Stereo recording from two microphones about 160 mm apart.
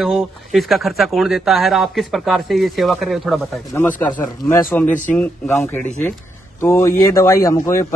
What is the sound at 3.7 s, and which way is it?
A man's voice, 15° left (ahead or behind).